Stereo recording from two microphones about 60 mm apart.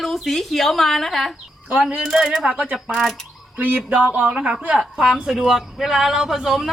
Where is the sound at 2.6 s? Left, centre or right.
Right.